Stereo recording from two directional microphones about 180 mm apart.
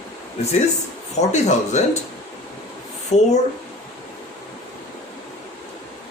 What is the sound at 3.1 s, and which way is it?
Speech, 40° left (ahead or behind).